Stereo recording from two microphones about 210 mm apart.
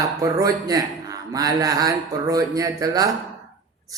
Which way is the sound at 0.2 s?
15° right (ahead or behind).